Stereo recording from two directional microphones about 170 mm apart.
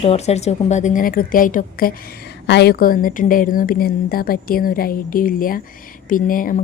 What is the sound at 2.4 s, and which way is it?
A woman's voice, 80° left.